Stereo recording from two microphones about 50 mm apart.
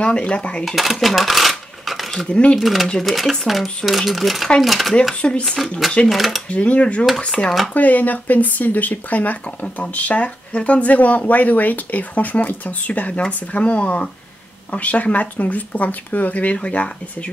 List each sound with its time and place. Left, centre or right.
0.0 s dishes: left
0.7 s speech: centre
2.2 s dishes: left
2.6 s speech: centre
5.2 s speech: centre
6.0 s speech: centre
6.5 s dishes: left
7.7 s speech: left
13.5 s dishes: left
14.7 s speech: left